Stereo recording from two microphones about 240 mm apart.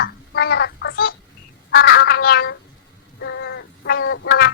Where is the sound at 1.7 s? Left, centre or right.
Left.